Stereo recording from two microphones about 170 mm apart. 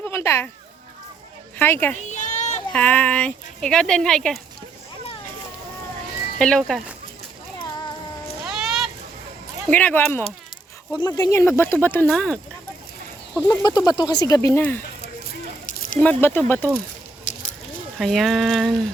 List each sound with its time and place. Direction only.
0.0 s speech: 15° left (ahead or behind)
1.5 s speech: 15° left (ahead or behind)
2.0 s a sound: 45° left (ahead or behind)
2.7 s speech: 10° left (ahead or behind)
6.4 s speech: 5° left (ahead or behind)
8.4 s a sound: 5° right (ahead or behind)
9.6 s speech: 10° left (ahead or behind)
13.5 s speech: 25° left (ahead or behind)
15.6 s a sound: 50° left (ahead or behind)
16.0 s speech: 10° left (ahead or behind)
17.3 s a sound: 45° left (ahead or behind)
18.0 s speech: centre (ahead or behind)